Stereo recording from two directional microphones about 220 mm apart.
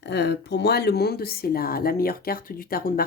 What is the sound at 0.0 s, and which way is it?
Speech, 50° left (ahead or behind).